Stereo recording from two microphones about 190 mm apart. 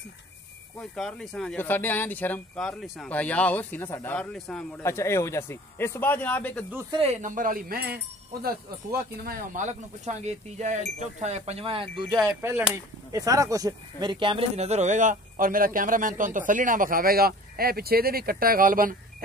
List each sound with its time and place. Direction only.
0.7 s speech: 5° left (ahead or behind)
6.9 s speech: 35° right (ahead or behind)
12.4 s speech: 10° right (ahead or behind); by 18.9 s 45° right (ahead or behind)